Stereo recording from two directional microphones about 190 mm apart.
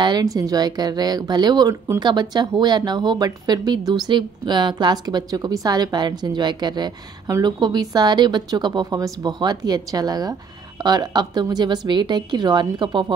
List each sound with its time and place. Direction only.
0.0 s a woman's voice: 20° right (ahead or behind)